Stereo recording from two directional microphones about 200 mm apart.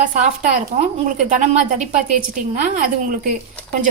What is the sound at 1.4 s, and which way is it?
Speech, 40° right (ahead or behind).